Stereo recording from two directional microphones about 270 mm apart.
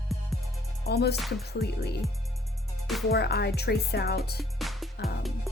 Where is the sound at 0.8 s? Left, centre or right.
Left.